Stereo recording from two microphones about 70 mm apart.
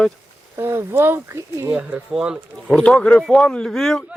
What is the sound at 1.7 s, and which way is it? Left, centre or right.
Speech, right.